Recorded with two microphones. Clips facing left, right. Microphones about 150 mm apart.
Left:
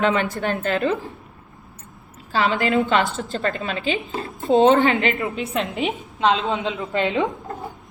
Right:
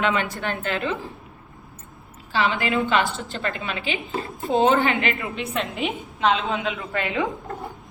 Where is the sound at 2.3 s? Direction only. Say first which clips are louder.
Left 3 dB; 35° left (ahead or behind).